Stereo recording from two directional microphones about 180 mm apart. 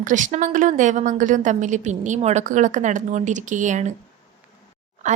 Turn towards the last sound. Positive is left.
turn(degrees=-40)  # may be behind; listen again after turning